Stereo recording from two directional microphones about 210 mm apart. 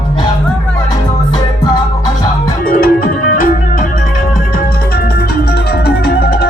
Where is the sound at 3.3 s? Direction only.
40° left (ahead or behind).